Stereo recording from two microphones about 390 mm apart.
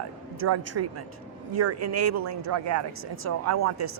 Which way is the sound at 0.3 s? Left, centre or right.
Right.